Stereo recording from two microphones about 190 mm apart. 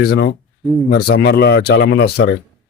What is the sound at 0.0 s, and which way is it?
Speech, 55° left (ahead or behind).